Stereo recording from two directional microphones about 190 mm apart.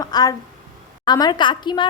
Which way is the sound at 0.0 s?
20° left (ahead or behind).